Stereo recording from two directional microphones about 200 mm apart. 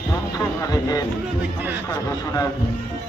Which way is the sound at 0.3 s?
15° left (ahead or behind).